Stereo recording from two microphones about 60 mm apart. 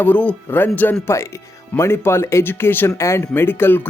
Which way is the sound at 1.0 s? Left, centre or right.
Left.